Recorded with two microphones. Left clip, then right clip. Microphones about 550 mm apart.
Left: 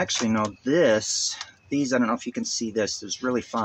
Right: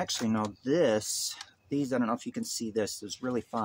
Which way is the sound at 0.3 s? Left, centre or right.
Right.